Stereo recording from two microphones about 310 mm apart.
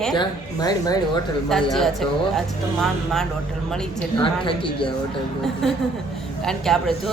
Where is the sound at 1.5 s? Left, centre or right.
Centre.